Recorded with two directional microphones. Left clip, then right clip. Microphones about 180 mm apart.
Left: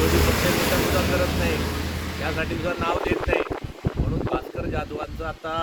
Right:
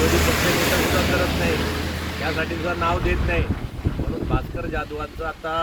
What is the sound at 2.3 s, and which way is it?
Speech, 15° left (ahead or behind).